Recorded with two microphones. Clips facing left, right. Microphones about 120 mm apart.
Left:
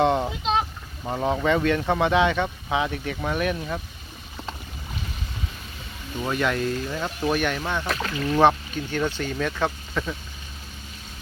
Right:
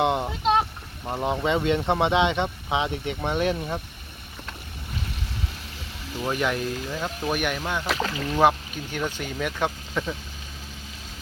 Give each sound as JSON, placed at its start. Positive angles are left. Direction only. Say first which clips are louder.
{"t": 0.0, "sound": "boat", "louder": "left 2 dB", "side_deg": -15}
{"t": 1.0, "sound": "speech", "louder": "left 2 dB", "side_deg": 10}
{"t": 1.5, "sound": "speech", "louder": "left 1 dB", "side_deg": -20}
{"t": 6.1, "sound": "speech", "louder": "left 1 dB", "side_deg": -15}